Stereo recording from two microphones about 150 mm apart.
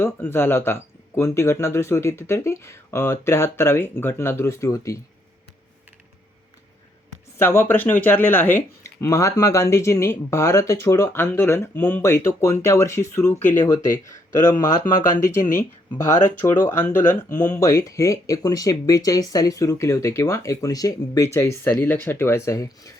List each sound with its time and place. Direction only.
0.0 s speech: 15° left (ahead or behind)
7.3 s speech: 15° left (ahead or behind)
15.5 s speech: 15° left (ahead or behind)